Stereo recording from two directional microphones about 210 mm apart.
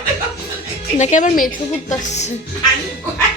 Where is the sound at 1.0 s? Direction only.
35° left (ahead or behind).